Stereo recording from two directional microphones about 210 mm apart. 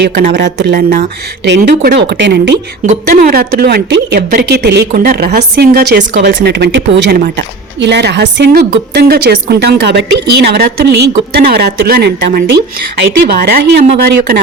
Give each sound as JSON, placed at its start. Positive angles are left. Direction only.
{"t": 0.0, "sound": "speech", "side_deg": -55}
{"t": 1.5, "sound": "speech", "side_deg": -55}